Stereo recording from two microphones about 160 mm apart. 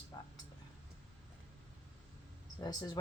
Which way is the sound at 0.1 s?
20° left (ahead or behind).